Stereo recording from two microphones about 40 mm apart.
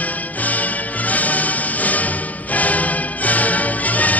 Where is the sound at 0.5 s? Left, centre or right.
Left.